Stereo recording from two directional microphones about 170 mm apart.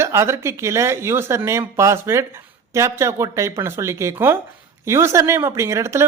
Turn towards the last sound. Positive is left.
turn(degrees=-15)  # may be behind; listen again after turning